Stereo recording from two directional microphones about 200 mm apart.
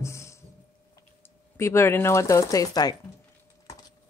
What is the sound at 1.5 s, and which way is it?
Speech, 15° left (ahead or behind).